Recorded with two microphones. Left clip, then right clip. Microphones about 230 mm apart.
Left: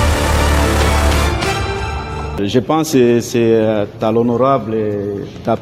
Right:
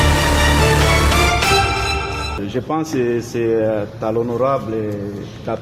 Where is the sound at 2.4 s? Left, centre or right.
Left.